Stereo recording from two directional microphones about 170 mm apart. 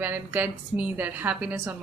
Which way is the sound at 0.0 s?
10° right (ahead or behind).